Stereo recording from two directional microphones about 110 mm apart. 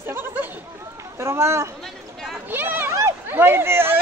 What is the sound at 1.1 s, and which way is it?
Speech, 25° right (ahead or behind).